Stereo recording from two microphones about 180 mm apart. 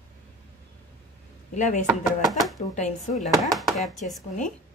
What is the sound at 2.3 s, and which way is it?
Speech, centre (ahead or behind).